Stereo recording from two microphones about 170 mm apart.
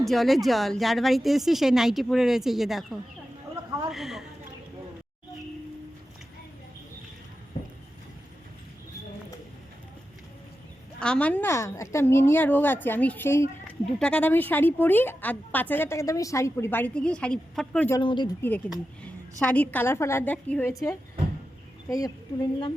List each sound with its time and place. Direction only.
0.0 s speech: centre (ahead or behind)
3.8 s a sound: centre (ahead or behind)
11.0 s a woman's voice: 5° left (ahead or behind)
18.0 s speech: 30° left (ahead or behind)
18.7 s a woman's voice: 5° left (ahead or behind)